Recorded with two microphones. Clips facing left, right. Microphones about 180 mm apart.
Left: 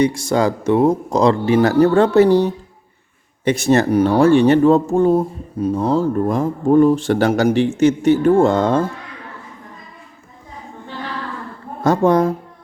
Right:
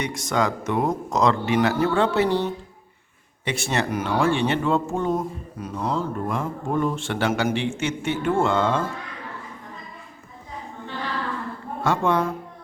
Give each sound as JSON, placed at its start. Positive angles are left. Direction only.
{"t": 0.0, "sound": "speech", "side_deg": 30}
{"t": 11.8, "sound": "speech", "side_deg": 40}